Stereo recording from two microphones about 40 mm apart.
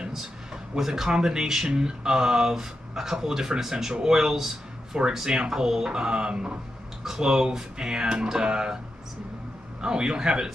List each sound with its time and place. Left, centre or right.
0.7 s speech: centre
9.8 s speech: centre